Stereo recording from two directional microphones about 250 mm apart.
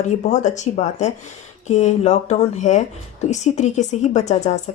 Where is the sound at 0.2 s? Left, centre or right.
Left.